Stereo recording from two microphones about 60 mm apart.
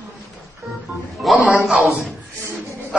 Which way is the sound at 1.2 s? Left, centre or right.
Centre.